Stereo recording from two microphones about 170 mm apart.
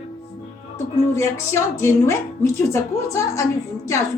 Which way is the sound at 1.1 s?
15° left (ahead or behind).